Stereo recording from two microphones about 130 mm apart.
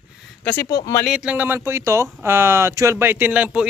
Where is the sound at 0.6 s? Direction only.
30° left (ahead or behind).